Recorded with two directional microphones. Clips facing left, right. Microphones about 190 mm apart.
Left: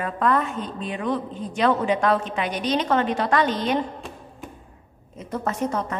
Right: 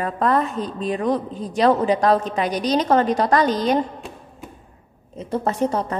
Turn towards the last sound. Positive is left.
turn(degrees=-30)  # may be behind; listen again after turning